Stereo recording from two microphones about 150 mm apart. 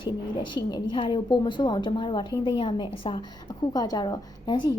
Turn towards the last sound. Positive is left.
turn(degrees=30)  # may be behind; listen again after turning